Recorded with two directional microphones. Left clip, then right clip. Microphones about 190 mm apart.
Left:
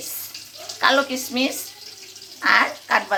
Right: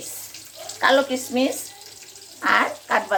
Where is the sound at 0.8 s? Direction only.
15° right (ahead or behind).